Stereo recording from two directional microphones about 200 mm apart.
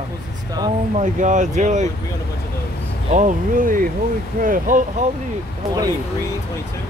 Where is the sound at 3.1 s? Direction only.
40° right (ahead or behind).